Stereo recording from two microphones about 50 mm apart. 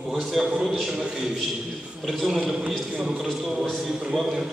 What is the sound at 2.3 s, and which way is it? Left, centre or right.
Speech, centre.